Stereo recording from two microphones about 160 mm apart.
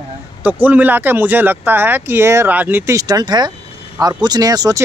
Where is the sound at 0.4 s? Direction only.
10° right (ahead or behind).